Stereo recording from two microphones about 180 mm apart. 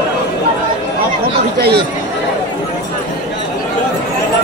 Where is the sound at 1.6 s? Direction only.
60° right (ahead or behind).